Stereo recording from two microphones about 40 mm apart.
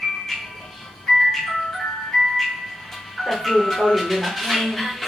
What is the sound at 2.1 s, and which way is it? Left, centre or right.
Music, centre.